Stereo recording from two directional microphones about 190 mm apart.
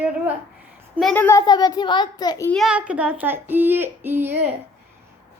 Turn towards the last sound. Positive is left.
turn(degrees=-10)  # may be behind; listen again after turning